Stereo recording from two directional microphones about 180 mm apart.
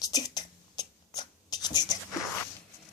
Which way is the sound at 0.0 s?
20° left (ahead or behind).